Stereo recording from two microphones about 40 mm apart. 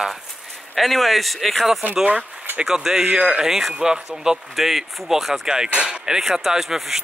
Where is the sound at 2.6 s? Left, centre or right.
Centre.